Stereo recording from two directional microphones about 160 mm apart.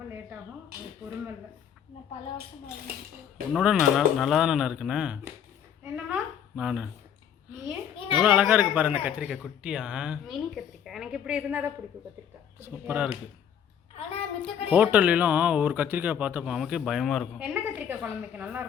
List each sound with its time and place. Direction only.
3.5 s a woman's voice: 5° right (ahead or behind)
7.9 s children playing: 35° left (ahead or behind)
8.2 s a man's voice: 10° right (ahead or behind)
13.9 s a child's voice: 35° left (ahead or behind)
14.7 s a man's voice: 10° right (ahead or behind)
17.5 s a man's voice: 10° right (ahead or behind)